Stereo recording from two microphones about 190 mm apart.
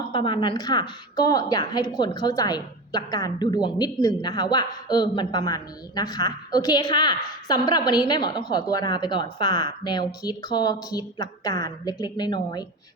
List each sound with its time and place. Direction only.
0.1 s a woman's voice: 25° left (ahead or behind)